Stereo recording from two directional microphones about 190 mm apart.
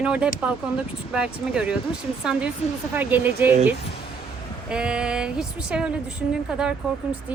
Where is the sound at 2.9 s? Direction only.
10° right (ahead or behind).